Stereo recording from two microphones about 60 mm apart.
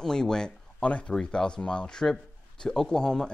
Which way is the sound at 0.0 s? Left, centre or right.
Centre.